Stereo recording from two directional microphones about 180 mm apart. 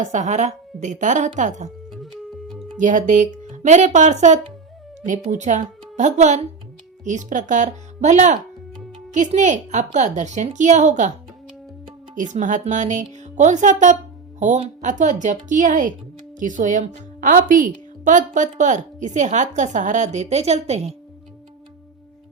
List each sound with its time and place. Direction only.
0.0 s a woman's voice: 40° right (ahead or behind)
2.7 s a woman's voice: 45° right (ahead or behind)
12.1 s a woman's voice: 45° right (ahead or behind)